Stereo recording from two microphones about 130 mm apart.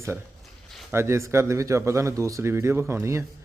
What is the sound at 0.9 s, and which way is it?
A man's voice, 20° right (ahead or behind).